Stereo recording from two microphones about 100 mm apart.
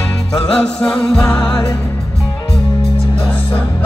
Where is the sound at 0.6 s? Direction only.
10° left (ahead or behind).